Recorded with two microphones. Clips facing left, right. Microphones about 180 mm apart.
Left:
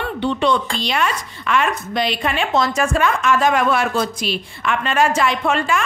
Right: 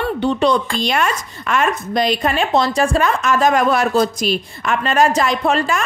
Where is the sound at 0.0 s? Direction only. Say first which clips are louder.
Right 3 dB; 40° right (ahead or behind).